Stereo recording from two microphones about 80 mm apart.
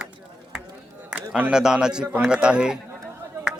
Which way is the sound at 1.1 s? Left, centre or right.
Centre.